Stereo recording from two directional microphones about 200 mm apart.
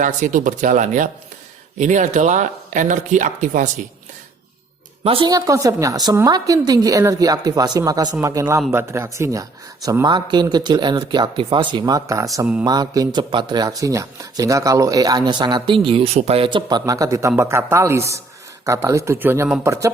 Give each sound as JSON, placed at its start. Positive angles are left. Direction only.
{"t": 0.0, "sound": "speech", "side_deg": -40}
{"t": 5.0, "sound": "a man's voice", "side_deg": -25}